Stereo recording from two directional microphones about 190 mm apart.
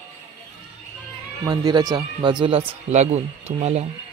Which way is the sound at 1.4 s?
20° right (ahead or behind).